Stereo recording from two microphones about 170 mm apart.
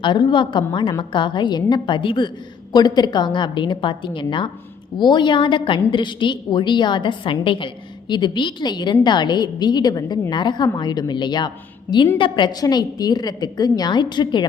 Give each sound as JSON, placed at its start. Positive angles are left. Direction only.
{"t": 0.0, "sound": "a woman's voice", "side_deg": 30}